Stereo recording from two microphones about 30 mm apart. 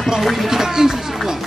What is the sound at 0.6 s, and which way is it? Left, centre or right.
Speech, centre.